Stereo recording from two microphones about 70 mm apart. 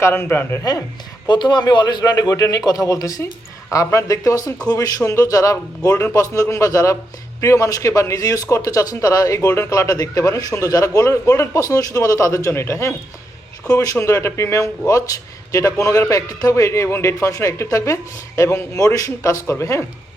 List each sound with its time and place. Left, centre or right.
0.0 s speech: left
1.3 s a man's voice: left
18.9 s speech: left